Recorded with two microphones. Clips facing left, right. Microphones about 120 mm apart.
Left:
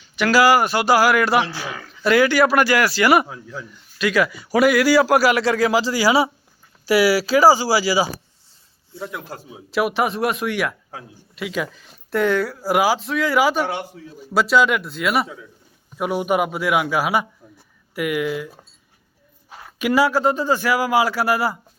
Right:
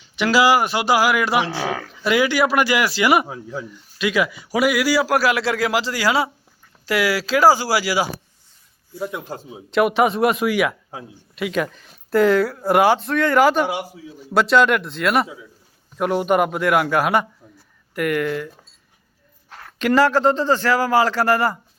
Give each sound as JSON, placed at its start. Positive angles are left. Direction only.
{"t": 0.2, "sound": "speech", "side_deg": -20}
{"t": 1.6, "sound": "speech", "side_deg": -75}
{"t": 2.0, "sound": "a man's voice", "side_deg": -15}
{"t": 9.0, "sound": "speech", "side_deg": -20}
{"t": 9.7, "sound": "a man's voice", "side_deg": 0}
{"t": 13.7, "sound": "a man's voice", "side_deg": -5}